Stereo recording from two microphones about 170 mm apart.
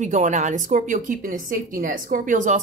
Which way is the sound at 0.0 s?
45° right (ahead or behind).